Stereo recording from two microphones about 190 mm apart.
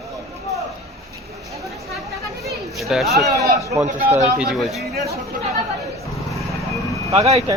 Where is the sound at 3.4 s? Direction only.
15° right (ahead or behind).